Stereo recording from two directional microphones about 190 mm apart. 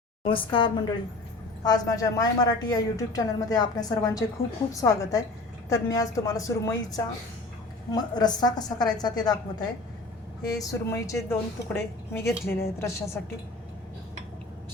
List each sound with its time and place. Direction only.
0.3 s a woman's voice: 25° left (ahead or behind); by 13.3 s 10° left (ahead or behind)